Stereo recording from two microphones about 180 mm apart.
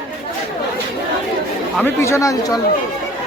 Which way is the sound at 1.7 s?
15° left (ahead or behind).